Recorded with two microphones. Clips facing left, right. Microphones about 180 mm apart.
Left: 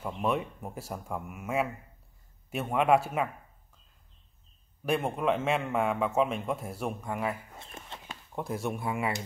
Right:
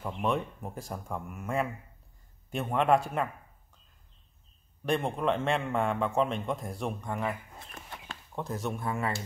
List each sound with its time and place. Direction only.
0.0 s a man's voice: 5° left (ahead or behind)
4.8 s a man's voice: 5° left (ahead or behind)
7.5 s chicken: 25° left (ahead or behind)
8.4 s speech: 10° left (ahead or behind)